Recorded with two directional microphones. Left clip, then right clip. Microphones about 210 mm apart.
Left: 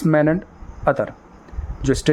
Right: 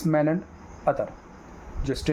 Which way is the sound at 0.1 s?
45° left (ahead or behind).